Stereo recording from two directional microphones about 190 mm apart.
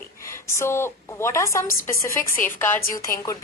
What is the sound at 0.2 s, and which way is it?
A woman's voice, 15° left (ahead or behind).